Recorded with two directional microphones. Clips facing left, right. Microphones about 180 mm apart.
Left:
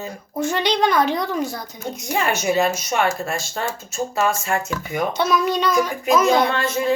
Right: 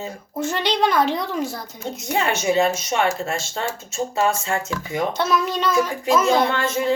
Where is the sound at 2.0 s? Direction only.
25° right (ahead or behind).